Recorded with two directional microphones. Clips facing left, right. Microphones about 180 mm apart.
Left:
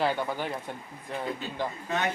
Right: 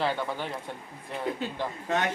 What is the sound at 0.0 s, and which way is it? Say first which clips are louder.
Speech: left 1 dB; centre (ahead or behind).